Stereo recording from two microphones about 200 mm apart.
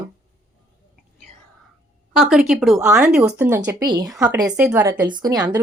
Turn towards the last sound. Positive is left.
turn(degrees=-20)  # may be behind; listen again after turning